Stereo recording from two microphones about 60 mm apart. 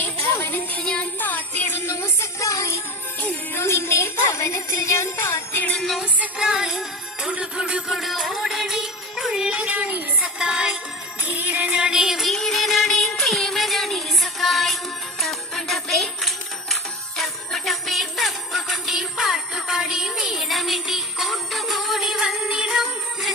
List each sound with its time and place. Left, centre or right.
0.0 s music: left
0.8 s music: centre
1.2 s music: left
1.9 s a sound: left
3.5 s jingle bell: left
6.4 s music: centre
7.7 s music: centre
11.2 s music: right
11.8 s music: centre
12.2 s music: centre
17.2 s jingle bell: centre
20.4 s music: centre